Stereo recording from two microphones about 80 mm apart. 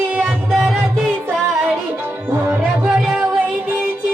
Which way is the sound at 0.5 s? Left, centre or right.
Centre.